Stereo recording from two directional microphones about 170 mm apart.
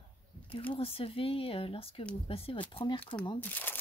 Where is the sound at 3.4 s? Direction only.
10° left (ahead or behind).